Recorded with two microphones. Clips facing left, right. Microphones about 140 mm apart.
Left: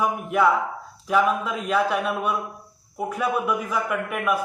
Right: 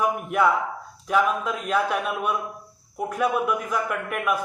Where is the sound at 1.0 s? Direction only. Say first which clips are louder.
Left 1 dB; centre (ahead or behind).